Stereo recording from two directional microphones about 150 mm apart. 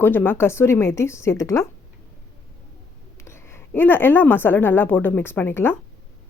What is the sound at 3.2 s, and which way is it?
Speech, 15° left (ahead or behind).